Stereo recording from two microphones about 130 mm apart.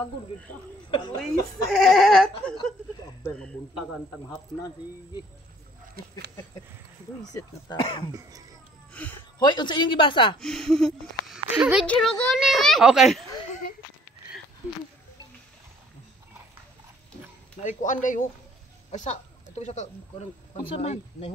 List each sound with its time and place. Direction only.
0.8 s speech: 40° left (ahead or behind)
1.2 s a child's voice: centre (ahead or behind)
7.8 s speech: 40° left (ahead or behind)
8.1 s speech: 30° right (ahead or behind)
8.9 s speech: 10° left (ahead or behind)
9.4 s speech: 35° left (ahead or behind)
10.4 s a child's voice: 5° left (ahead or behind)
11.3 s speech: 10° right (ahead or behind)
11.8 s a child's voice: 5° left (ahead or behind)
17.6 s speech: 75° left (ahead or behind)
18.9 s speech: 60° left (ahead or behind)